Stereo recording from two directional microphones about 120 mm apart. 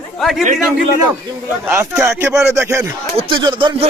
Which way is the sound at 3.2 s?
40° right (ahead or behind).